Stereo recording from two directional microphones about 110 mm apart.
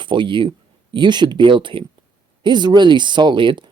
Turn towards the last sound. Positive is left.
turn(degrees=-45)  # may be behind; listen again after turning